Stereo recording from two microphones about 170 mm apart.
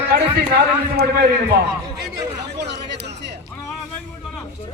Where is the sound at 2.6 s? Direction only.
85° right.